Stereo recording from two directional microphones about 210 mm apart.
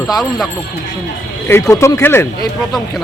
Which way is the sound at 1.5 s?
15° left (ahead or behind).